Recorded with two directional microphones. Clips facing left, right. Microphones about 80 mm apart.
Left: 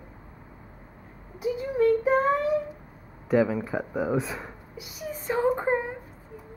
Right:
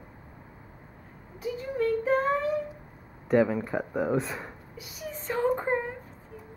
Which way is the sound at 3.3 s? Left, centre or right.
Centre.